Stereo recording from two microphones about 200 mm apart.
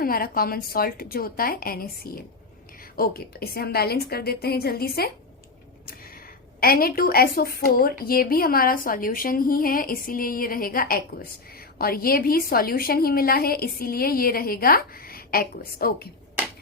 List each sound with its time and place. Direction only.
0.0 s a woman's voice: 45° left (ahead or behind)
6.6 s a woman's voice: 50° left (ahead or behind)